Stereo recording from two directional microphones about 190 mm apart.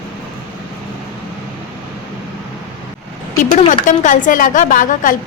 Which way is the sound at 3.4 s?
40° left (ahead or behind).